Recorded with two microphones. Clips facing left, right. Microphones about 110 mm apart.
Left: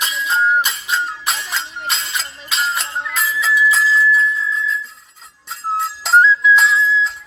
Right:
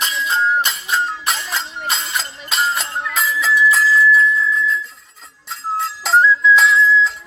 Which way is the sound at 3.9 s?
30° left (ahead or behind).